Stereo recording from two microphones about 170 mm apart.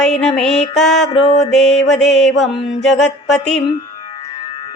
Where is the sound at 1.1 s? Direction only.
40° left (ahead or behind).